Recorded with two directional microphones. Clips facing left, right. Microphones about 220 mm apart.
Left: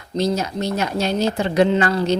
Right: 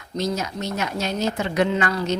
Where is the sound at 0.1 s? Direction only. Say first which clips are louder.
Left 5 dB; 30° left (ahead or behind).